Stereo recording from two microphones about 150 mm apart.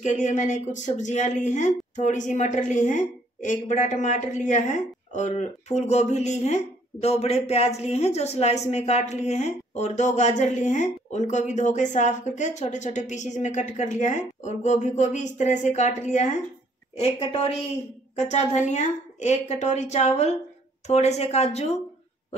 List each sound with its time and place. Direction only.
0.0 s speech: 55° left (ahead or behind)